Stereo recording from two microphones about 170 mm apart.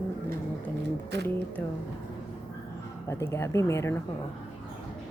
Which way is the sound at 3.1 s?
15° left (ahead or behind).